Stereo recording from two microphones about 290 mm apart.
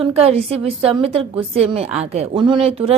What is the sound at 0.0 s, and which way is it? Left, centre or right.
A woman's voice, right.